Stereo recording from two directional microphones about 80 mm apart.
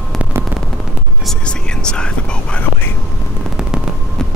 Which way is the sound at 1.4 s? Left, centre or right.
Centre.